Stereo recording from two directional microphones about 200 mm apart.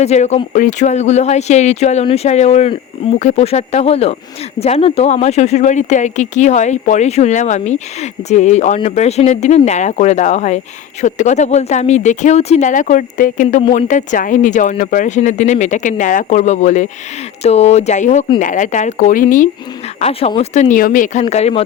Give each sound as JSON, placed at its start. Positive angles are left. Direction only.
{"t": 0.0, "sound": "speech", "side_deg": 35}
{"t": 20.0, "sound": "speech", "side_deg": 30}